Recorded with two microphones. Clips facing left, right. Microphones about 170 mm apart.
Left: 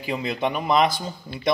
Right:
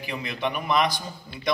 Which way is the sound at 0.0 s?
25° left (ahead or behind).